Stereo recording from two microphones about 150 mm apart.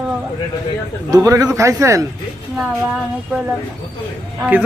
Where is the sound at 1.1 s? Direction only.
25° right (ahead or behind).